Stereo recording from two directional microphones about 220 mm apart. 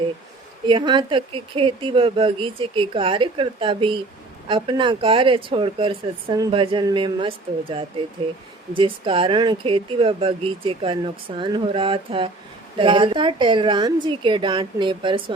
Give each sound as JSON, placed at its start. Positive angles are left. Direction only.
{"t": 0.6, "sound": "speech", "side_deg": -20}